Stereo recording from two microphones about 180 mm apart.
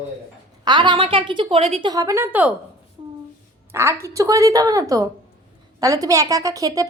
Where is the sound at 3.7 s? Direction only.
15° right (ahead or behind).